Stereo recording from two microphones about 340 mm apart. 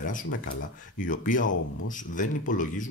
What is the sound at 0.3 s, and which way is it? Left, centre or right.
Speech, left.